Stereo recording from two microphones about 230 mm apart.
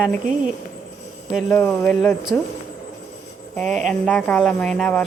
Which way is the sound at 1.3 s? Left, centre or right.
Centre.